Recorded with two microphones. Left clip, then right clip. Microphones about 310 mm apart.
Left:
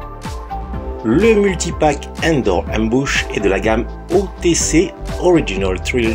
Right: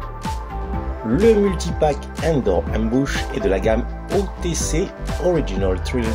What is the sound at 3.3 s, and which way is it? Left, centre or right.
Speech, right.